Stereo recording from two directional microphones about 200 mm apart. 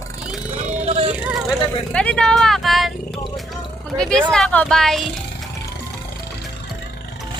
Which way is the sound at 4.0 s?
5° left (ahead or behind).